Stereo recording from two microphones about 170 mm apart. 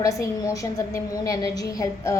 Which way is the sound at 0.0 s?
20° left (ahead or behind).